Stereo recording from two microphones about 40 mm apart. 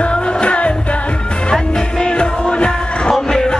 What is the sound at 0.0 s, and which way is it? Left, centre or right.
Music, left.